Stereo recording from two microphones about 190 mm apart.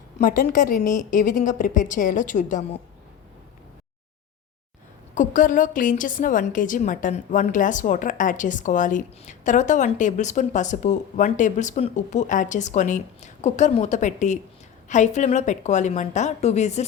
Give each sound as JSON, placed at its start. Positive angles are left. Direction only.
{"t": 0.2, "sound": "a woman's voice", "side_deg": 45}
{"t": 5.1, "sound": "a woman's voice", "side_deg": 40}